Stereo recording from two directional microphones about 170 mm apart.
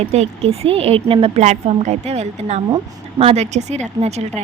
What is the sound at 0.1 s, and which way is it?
A woman's voice, 35° right (ahead or behind).